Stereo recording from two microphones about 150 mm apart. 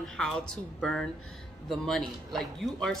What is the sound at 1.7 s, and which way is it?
Speech, centre (ahead or behind).